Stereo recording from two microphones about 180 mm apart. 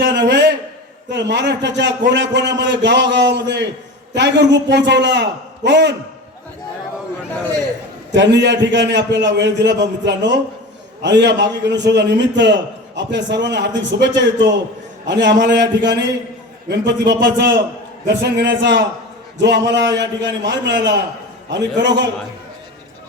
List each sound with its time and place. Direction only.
0.0 s a sound: 70° right (ahead or behind)
1.1 s a man's voice: 70° right (ahead or behind)
8.1 s a man's voice: 75° right (ahead or behind)